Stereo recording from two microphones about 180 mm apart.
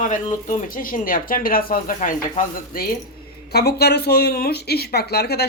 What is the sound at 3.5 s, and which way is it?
Speech, 60° left (ahead or behind).